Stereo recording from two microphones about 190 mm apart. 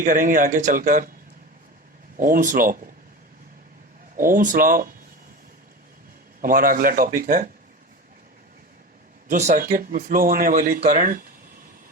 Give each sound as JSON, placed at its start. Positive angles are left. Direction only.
{"t": 0.0, "sound": "speech", "side_deg": -45}
{"t": 2.1, "sound": "speech", "side_deg": -45}
{"t": 4.2, "sound": "speech", "side_deg": -45}
{"t": 6.4, "sound": "speech", "side_deg": -50}
{"t": 9.3, "sound": "speech", "side_deg": -40}